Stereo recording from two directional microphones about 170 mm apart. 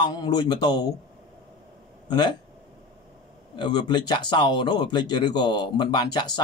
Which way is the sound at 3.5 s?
25° left (ahead or behind).